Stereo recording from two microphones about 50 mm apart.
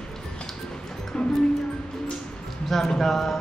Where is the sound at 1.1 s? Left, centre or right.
Centre.